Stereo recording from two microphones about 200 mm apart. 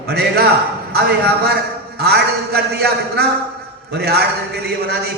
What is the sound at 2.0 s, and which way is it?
A man's voice, 55° right (ahead or behind).